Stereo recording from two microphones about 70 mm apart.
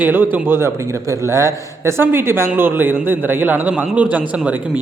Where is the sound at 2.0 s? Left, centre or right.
Right.